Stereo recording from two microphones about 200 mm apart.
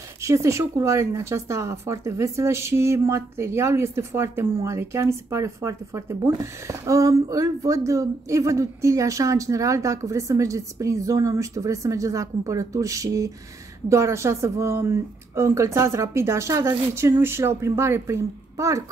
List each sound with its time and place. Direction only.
0.2 s speech: 15° right (ahead or behind)